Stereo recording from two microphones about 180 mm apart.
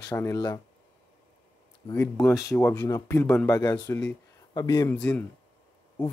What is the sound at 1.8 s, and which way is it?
Speech, 15° left (ahead or behind).